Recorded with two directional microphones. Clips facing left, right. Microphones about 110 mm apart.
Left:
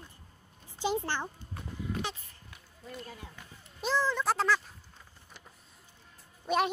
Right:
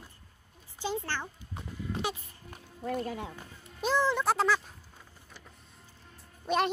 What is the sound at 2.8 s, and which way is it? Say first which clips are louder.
Speech: right 11 dB; 65° right (ahead or behind).